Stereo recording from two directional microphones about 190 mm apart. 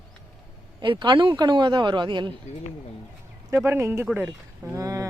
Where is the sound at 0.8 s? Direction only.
25° right (ahead or behind).